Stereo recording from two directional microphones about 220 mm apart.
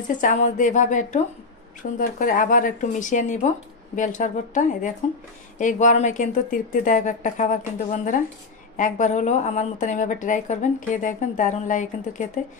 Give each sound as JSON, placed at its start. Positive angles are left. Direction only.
{"t": 0.1, "sound": "a woman's voice", "side_deg": 35}